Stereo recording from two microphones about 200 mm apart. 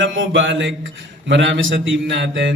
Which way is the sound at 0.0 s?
70° right (ahead or behind).